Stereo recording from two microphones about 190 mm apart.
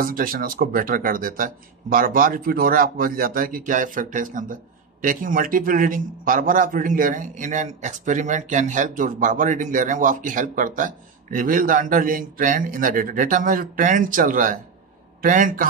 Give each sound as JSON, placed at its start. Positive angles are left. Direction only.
{"t": 0.0, "sound": "a man's voice", "side_deg": -50}